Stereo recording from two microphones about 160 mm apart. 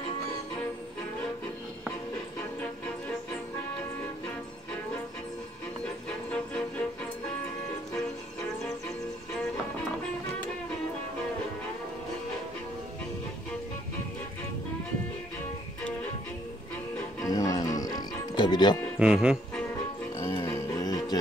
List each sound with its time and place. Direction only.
17.2 s music: 20° left (ahead or behind)
18.9 s speech: 5° right (ahead or behind)
20.2 s music: 15° left (ahead or behind)